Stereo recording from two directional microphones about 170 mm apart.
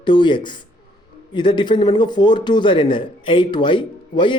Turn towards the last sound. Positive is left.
turn(degrees=30)  # may be behind; listen again after turning